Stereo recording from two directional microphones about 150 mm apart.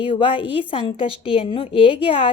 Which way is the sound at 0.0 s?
35° left (ahead or behind).